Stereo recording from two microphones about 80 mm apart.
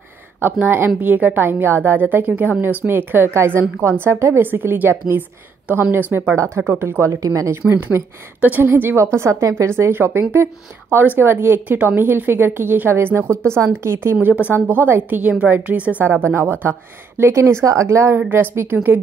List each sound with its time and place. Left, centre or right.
0.4 s a woman's voice: right
8.4 s a woman's voice: right
13.3 s a woman's voice: centre
13.6 s a woman's voice: right